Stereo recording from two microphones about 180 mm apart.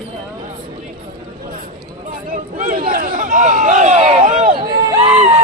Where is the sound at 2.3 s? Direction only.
45° right (ahead or behind).